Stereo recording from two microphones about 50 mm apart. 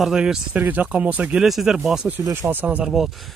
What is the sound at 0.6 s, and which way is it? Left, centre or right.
Speech, right.